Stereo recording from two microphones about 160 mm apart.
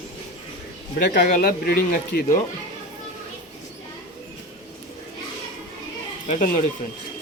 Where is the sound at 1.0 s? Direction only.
70° left (ahead or behind).